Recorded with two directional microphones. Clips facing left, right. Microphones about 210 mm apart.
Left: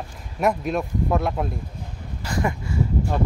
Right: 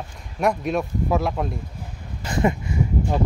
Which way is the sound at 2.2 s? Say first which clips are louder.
Right 4 dB; 20° right (ahead or behind).